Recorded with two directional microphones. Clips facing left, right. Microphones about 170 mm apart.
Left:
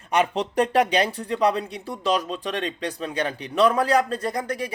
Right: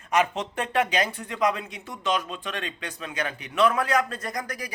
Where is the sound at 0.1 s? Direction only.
35° left (ahead or behind).